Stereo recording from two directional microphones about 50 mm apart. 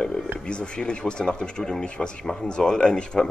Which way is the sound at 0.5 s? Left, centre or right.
Centre.